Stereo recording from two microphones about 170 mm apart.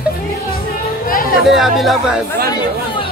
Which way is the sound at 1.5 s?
Centre (ahead or behind).